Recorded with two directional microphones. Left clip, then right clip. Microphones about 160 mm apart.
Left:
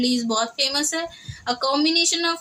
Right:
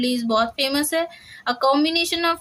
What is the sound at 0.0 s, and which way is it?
Speech, 15° right (ahead or behind).